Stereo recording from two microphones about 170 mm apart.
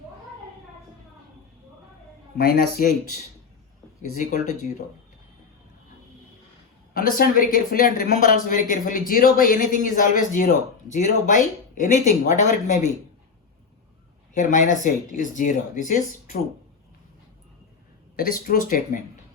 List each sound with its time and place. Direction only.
2.4 s speech: 60° left (ahead or behind)
4.2 s speech: 45° left (ahead or behind)
6.9 s speech: 60° left (ahead or behind)
14.3 s speech: 50° left (ahead or behind)
18.2 s speech: 55° left (ahead or behind)